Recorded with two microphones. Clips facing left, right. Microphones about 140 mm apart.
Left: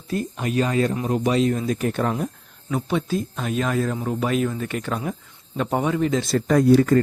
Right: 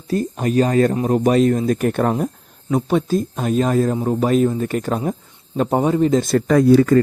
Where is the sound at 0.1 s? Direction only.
40° right (ahead or behind).